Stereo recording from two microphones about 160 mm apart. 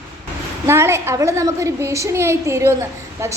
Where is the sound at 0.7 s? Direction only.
15° right (ahead or behind).